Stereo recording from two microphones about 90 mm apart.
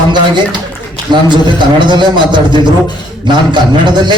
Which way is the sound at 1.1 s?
60° right (ahead or behind).